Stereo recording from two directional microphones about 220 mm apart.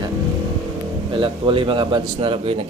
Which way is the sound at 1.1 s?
25° right (ahead or behind).